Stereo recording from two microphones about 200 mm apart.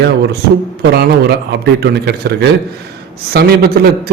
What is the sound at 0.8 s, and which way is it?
A man's voice, 55° right (ahead or behind).